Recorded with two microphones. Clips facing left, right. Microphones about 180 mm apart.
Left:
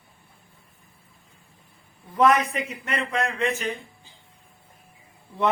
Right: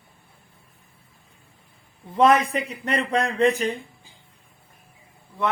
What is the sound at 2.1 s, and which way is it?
Speech, 25° right (ahead or behind).